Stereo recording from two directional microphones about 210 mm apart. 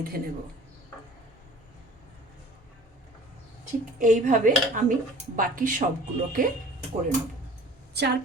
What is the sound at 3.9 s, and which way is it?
Dishes, 35° right (ahead or behind).